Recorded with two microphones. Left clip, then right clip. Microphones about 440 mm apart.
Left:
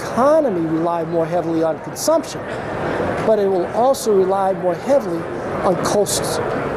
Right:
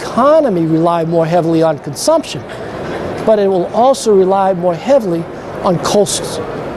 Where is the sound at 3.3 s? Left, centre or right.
Right.